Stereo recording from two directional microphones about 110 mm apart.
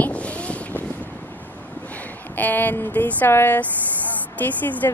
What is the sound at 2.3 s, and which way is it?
Speech, 15° left (ahead or behind).